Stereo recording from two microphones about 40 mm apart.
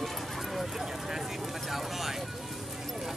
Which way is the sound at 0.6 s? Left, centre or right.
Centre.